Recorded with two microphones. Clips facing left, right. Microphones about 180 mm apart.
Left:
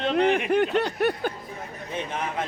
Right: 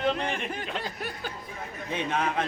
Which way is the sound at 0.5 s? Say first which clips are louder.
Left 12 dB; 65° left (ahead or behind).